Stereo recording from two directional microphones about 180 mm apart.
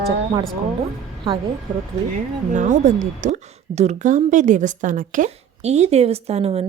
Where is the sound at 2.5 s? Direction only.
45° right (ahead or behind).